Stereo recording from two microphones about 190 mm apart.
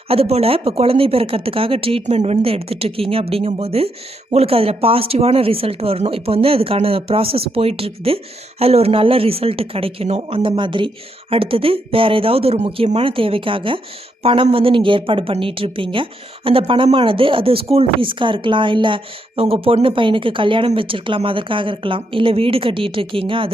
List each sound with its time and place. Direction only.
0.1 s a woman's voice: 30° right (ahead or behind)